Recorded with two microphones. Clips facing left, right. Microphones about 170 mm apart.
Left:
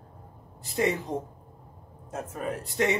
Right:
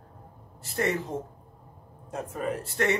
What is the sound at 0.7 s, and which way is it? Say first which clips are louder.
Speech: left 1 dB; 15° left (ahead or behind).